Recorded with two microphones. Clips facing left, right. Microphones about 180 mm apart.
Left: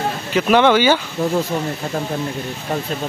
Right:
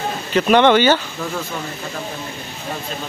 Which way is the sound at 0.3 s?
5° left (ahead or behind).